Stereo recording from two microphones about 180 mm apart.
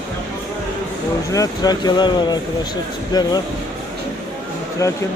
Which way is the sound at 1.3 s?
20° left (ahead or behind).